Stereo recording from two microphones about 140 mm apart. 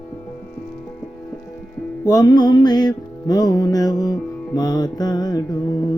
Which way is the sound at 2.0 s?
25° left (ahead or behind).